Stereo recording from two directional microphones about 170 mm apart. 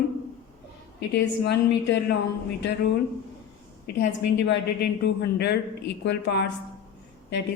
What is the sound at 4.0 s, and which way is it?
A woman's voice, 90° left.